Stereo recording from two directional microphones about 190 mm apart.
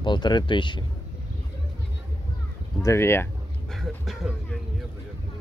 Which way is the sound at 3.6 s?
Centre (ahead or behind).